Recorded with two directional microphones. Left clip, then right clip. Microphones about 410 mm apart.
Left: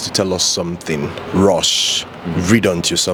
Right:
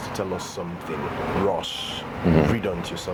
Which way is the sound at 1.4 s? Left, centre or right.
Left.